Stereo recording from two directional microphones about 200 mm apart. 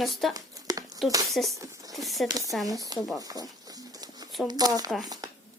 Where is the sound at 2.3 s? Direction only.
20° right (ahead or behind).